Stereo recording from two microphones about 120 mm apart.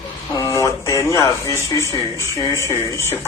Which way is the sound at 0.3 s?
25° left (ahead or behind).